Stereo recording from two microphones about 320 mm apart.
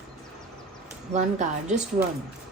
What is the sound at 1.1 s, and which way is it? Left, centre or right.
Speech, right.